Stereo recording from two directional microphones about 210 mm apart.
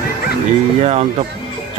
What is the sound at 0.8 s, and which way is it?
Speech, 30° right (ahead or behind).